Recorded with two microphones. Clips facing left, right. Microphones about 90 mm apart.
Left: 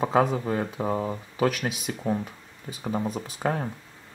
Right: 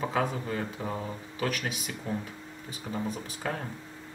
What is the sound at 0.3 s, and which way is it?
Speech, 35° left (ahead or behind).